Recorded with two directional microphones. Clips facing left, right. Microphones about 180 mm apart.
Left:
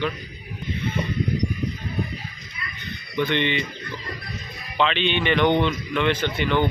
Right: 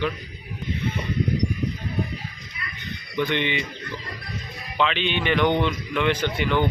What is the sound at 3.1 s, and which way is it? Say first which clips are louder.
Speech: left 1 dB; 10° right (ahead or behind).